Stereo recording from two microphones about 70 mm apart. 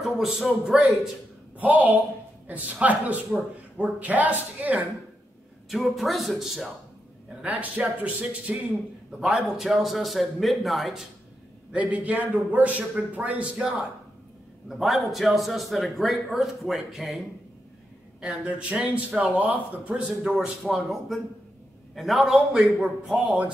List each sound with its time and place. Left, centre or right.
0.0 s a man's voice: centre
1.6 s a man's voice: right
5.7 s a man's voice: centre
7.4 s a man's voice: right
9.2 s a man's voice: centre
11.7 s a man's voice: centre
14.7 s a man's voice: centre
18.2 s a man's voice: centre
20.2 s a man's voice: centre